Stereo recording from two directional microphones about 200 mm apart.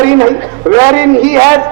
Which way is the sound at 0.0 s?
15° right (ahead or behind).